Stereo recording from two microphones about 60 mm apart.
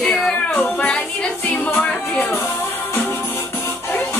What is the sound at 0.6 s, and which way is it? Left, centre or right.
Music, left.